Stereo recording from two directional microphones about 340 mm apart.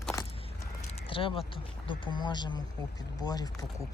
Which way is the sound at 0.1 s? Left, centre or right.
Centre.